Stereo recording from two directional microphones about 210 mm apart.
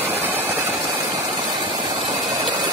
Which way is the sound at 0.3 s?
10° right (ahead or behind).